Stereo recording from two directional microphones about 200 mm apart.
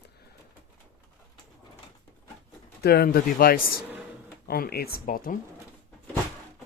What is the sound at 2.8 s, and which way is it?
Speech, 50° left (ahead or behind).